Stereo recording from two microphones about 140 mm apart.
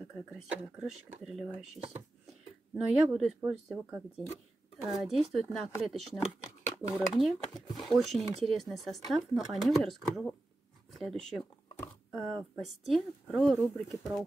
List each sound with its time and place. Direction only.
0.3 s speech: 5° right (ahead or behind)
2.7 s speech: centre (ahead or behind)
6.1 s a sound: 20° left (ahead or behind)
7.0 s speech: centre (ahead or behind)